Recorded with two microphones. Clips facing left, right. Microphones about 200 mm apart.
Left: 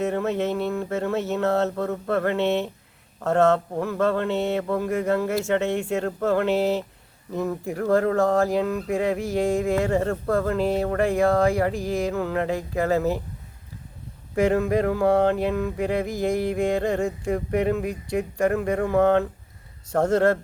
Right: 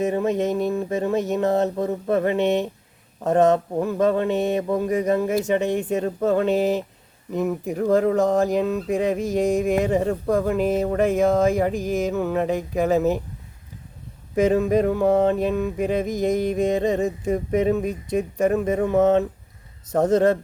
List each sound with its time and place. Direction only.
0.0 s a sound: 15° right (ahead or behind)
7.3 s speech: 15° right (ahead or behind)
14.3 s speech: 20° right (ahead or behind)